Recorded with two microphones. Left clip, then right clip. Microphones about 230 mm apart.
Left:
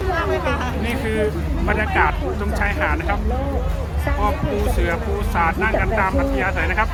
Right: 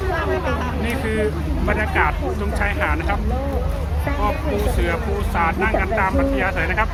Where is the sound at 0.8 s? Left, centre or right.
Centre.